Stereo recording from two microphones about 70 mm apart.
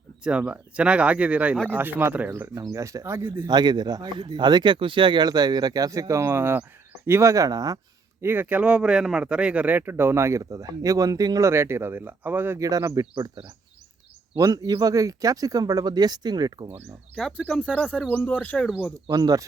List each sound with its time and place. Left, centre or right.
0.3 s speech: centre
2.6 s speech: right
3.4 s speech: right
8.2 s speech: right
8.6 s speech: centre; by 10.4 s right
10.4 s speech: right
11.3 s speech: right
12.5 s speech: right
17.2 s speech: centre; by 18.5 s left
19.0 s speech: right